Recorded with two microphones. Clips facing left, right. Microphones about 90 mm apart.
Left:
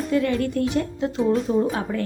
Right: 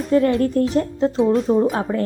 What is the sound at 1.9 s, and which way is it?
Speech, 20° right (ahead or behind).